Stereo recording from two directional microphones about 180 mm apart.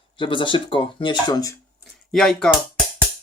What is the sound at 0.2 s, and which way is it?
Speech, 25° left (ahead or behind).